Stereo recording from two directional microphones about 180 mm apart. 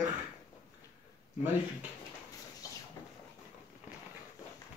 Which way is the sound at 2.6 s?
20° left (ahead or behind).